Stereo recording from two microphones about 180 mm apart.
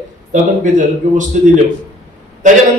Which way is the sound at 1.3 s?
45° right (ahead or behind).